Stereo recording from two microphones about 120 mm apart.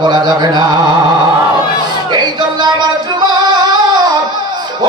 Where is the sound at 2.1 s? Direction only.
35° right (ahead or behind).